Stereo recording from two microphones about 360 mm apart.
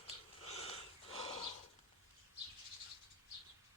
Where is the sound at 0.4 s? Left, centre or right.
Centre.